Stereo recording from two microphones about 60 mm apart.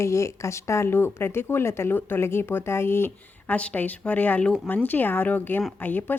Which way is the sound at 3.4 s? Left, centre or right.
Left.